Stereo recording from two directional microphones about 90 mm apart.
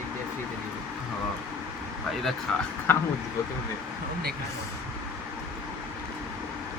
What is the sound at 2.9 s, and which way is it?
Speech, 25° left (ahead or behind).